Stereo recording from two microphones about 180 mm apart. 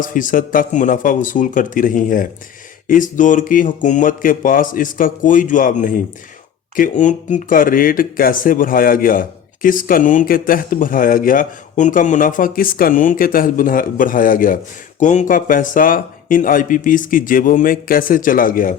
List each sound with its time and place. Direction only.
0.0 s speech: 50° left (ahead or behind)